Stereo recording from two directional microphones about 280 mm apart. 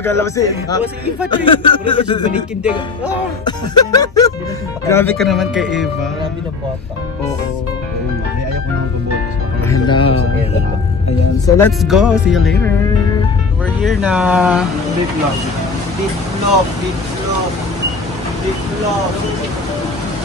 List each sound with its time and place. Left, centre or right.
0.0 s speech: centre
3.4 s speech: centre
9.7 s music: centre
11.1 s speech: centre
13.8 s speech: centre